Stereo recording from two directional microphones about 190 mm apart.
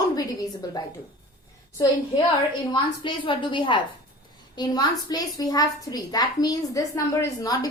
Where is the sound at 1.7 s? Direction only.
20° left (ahead or behind).